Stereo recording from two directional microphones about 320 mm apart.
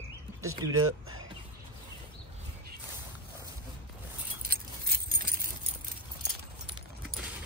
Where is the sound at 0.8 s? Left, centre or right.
Right.